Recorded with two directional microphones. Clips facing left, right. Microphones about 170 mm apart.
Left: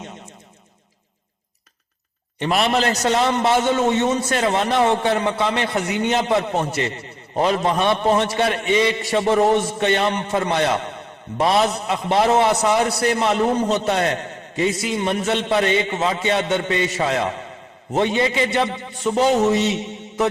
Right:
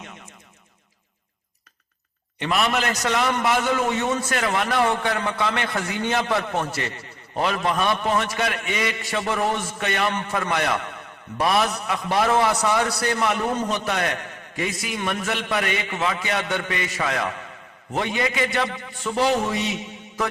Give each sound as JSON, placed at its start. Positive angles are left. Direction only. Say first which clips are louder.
{"t": 2.5, "sound": "a man's voice", "louder": "left 4 dB", "side_deg": 30}